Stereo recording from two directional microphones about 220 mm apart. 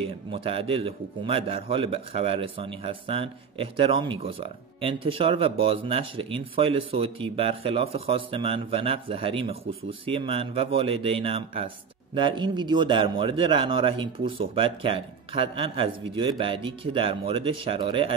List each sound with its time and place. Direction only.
0.3 s a man's voice: 25° right (ahead or behind)